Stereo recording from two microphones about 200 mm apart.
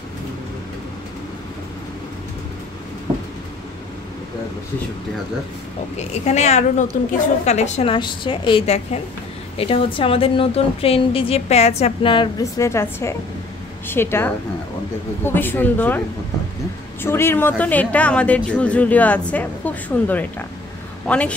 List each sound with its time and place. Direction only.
5.9 s a woman's voice: 35° left (ahead or behind); by 16.0 s 10° left (ahead or behind)
17.0 s speech: 10° left (ahead or behind)